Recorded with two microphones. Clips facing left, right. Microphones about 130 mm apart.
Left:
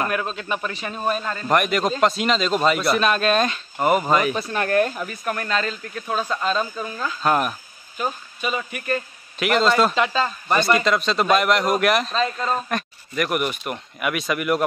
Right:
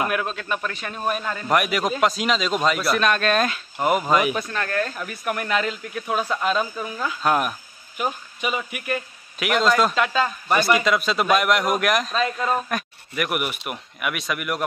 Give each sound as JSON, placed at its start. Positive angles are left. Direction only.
{"t": 0.0, "sound": "a man's voice", "side_deg": 0}
{"t": 4.5, "sound": "speech", "side_deg": 25}
{"t": 5.0, "sound": "speech", "side_deg": -5}
{"t": 8.0, "sound": "a man's voice", "side_deg": -15}